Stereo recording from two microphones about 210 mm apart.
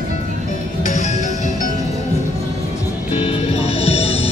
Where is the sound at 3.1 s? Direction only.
30° left (ahead or behind).